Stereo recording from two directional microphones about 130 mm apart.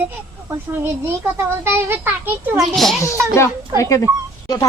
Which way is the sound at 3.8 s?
25° left (ahead or behind).